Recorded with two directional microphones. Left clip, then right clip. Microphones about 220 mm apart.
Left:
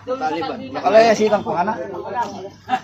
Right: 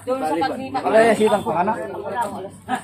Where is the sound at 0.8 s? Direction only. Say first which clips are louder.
Left 3 dB; 30° left (ahead or behind).